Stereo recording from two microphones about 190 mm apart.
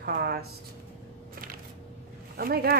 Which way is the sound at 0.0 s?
55° right (ahead or behind).